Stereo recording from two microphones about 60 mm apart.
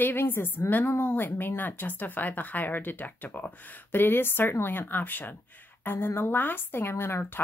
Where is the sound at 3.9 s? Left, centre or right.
Left.